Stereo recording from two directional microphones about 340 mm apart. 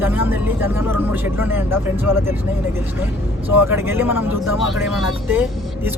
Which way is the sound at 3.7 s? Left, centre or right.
Centre.